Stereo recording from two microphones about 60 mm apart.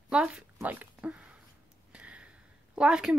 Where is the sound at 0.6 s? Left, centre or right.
Right.